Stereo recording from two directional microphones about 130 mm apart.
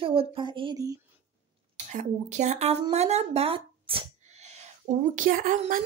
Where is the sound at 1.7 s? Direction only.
65° right (ahead or behind); by 4.1 s 45° right (ahead or behind).